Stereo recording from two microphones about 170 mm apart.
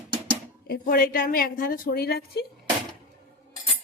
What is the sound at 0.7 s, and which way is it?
A woman's voice, 60° left (ahead or behind).